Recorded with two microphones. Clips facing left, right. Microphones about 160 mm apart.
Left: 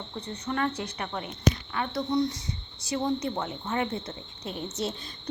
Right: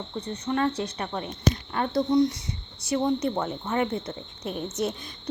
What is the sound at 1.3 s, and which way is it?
Speech, 40° right (ahead or behind).